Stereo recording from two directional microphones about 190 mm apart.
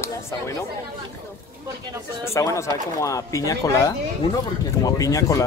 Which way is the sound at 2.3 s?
15° left (ahead or behind).